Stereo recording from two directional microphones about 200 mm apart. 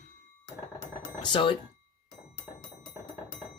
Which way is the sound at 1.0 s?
25° left (ahead or behind).